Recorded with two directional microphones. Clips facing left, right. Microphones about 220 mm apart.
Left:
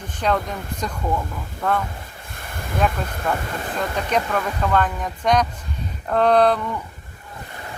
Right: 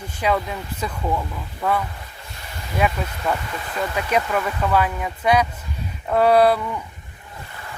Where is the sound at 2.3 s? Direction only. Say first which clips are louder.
Left 3 dB; 50° left (ahead or behind).